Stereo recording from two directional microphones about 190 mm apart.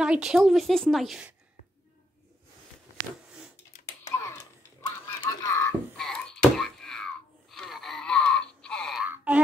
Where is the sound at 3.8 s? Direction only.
15° left (ahead or behind).